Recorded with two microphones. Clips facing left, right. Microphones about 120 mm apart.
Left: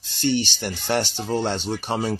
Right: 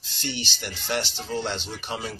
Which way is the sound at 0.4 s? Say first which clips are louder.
Left 7 dB; 45° left (ahead or behind).